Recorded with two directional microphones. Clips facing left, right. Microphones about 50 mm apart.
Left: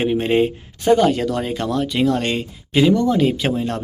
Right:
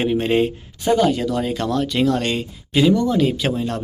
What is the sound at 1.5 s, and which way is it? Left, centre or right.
Speech, centre.